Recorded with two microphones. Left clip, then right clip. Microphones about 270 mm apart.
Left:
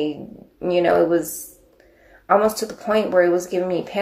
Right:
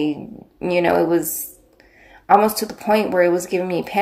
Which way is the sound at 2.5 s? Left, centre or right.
Right.